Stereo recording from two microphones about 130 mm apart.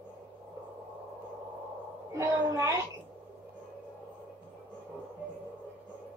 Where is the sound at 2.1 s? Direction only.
20° right (ahead or behind).